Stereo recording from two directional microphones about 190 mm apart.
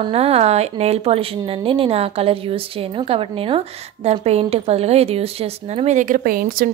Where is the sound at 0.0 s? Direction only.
30° right (ahead or behind).